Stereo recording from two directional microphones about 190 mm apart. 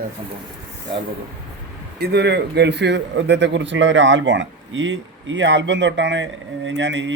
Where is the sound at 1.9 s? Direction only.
60° right (ahead or behind).